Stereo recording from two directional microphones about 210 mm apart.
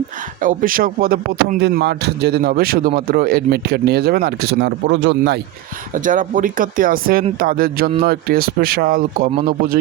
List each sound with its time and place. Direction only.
0.4 s speech: 40° right (ahead or behind)
5.9 s speech: 40° right (ahead or behind)